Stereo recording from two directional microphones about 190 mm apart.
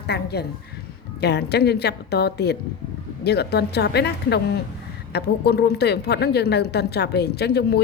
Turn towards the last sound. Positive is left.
turn(degrees=60)  # may be behind; listen again after turning